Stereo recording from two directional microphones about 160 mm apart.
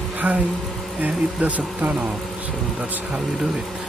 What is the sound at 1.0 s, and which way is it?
Speech, 5° right (ahead or behind).